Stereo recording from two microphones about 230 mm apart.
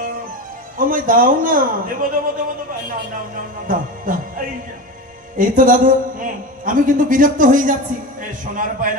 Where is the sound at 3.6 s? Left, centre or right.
Right.